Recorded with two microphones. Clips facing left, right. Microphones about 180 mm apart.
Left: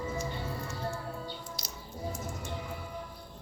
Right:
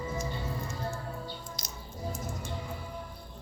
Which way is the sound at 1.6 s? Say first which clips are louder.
Even; 5° left (ahead or behind).